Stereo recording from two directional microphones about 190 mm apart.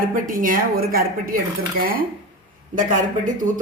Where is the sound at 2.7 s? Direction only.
45° right (ahead or behind).